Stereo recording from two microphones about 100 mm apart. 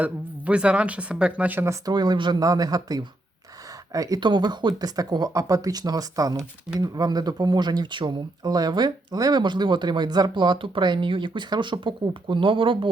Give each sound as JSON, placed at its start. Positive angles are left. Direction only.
{"t": 0.0, "sound": "speech", "side_deg": -10}
{"t": 1.8, "sound": "speech", "side_deg": -45}